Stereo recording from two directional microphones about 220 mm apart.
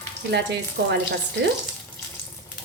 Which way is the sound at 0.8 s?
50° right (ahead or behind).